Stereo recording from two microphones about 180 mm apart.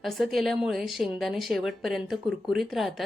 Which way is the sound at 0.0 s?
Centre (ahead or behind).